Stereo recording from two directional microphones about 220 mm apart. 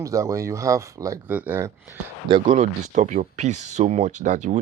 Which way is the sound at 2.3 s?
25° right (ahead or behind).